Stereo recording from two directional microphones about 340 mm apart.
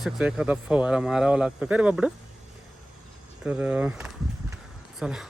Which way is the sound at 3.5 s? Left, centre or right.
Centre.